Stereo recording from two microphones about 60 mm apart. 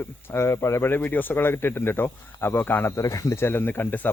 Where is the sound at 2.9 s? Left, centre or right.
Left.